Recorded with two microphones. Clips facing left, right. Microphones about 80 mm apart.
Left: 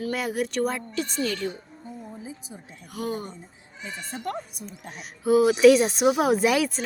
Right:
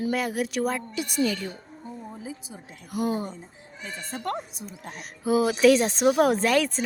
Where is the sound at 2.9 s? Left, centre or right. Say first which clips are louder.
Right 4 dB; centre.